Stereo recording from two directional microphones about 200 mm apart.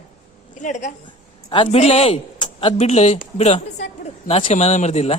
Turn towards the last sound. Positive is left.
turn(degrees=30)  # may be behind; listen again after turning